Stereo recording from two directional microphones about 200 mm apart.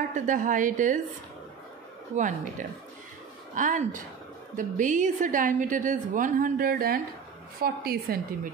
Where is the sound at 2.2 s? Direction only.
40° right (ahead or behind).